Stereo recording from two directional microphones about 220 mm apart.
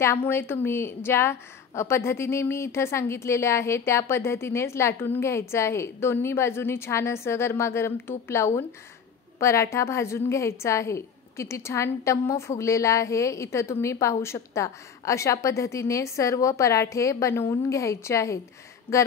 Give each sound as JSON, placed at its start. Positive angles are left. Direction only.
{"t": 0.0, "sound": "a woman's voice", "side_deg": 10}
{"t": 18.9, "sound": "speech", "side_deg": 25}